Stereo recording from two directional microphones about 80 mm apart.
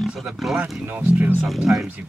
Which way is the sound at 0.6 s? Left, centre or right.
Right.